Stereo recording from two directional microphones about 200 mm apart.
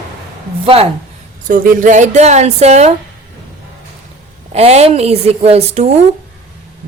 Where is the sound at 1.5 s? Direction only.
40° right (ahead or behind).